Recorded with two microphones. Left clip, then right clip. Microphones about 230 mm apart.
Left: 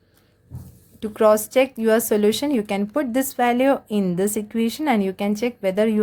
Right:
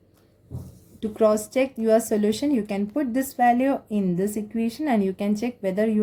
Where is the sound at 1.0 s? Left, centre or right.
Left.